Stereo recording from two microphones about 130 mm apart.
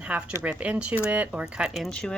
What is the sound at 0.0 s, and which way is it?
Speech, 10° right (ahead or behind).